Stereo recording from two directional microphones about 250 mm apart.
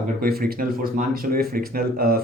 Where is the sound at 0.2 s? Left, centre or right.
Right.